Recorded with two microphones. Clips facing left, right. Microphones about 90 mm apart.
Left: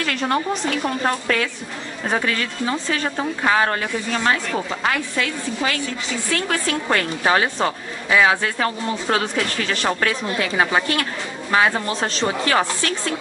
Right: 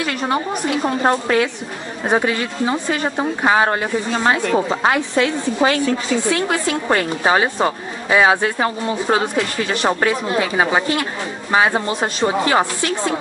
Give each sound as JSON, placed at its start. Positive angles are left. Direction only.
{"t": 0.0, "sound": "a woman's voice", "side_deg": -10}
{"t": 0.8, "sound": "a woman's voice", "side_deg": -25}